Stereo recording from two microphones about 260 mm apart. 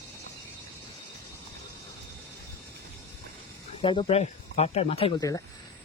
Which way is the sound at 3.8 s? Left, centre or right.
Left.